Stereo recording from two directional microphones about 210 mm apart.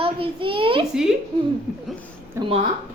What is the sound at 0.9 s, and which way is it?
Speech, 5° right (ahead or behind).